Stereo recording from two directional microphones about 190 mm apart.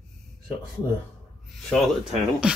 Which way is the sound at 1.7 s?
5° left (ahead or behind).